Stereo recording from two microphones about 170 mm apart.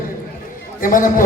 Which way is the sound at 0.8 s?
55° left (ahead or behind).